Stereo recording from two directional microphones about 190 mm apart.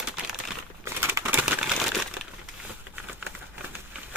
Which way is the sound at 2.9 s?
10° right (ahead or behind).